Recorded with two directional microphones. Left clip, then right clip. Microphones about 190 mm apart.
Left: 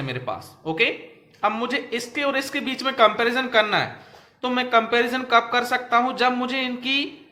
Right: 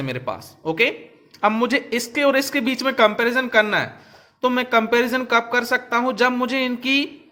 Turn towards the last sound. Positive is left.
turn(degrees=-40)  # may be behind; listen again after turning